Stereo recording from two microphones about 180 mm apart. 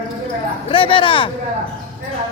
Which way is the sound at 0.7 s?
30° left (ahead or behind).